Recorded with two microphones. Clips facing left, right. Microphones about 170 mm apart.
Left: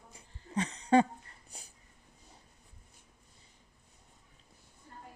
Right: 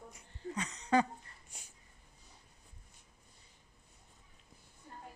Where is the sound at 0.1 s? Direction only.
30° left (ahead or behind).